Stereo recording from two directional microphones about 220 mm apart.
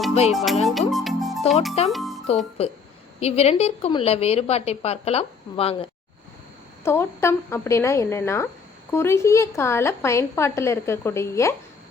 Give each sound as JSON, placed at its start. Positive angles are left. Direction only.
{"t": 0.1, "sound": "music", "side_deg": 30}
{"t": 0.6, "sound": "speech", "side_deg": 0}
{"t": 1.9, "sound": "music", "side_deg": 0}
{"t": 2.6, "sound": "a woman's voice", "side_deg": 30}
{"t": 6.8, "sound": "a woman's voice", "side_deg": 10}